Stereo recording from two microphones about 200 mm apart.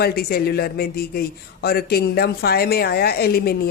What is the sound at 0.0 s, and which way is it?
Speech, 50° left (ahead or behind).